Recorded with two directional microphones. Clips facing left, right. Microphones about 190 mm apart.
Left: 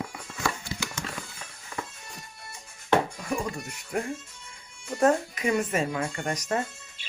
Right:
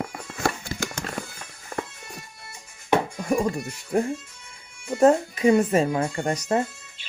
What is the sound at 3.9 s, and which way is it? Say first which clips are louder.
Speech: right 7 dB; 30° right (ahead or behind).